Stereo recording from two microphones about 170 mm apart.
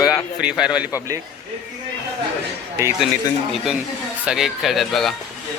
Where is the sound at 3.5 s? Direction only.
Centre (ahead or behind).